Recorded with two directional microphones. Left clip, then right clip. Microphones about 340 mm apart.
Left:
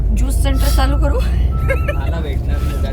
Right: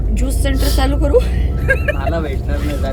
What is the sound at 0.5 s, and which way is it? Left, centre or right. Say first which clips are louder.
Speech: right 2 dB; left.